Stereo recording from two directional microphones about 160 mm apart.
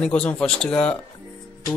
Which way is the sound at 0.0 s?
5° left (ahead or behind).